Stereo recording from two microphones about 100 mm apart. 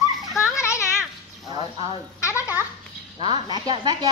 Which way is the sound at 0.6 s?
30° left (ahead or behind).